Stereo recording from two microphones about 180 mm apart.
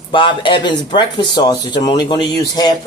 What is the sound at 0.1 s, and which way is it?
Speech, 25° left (ahead or behind).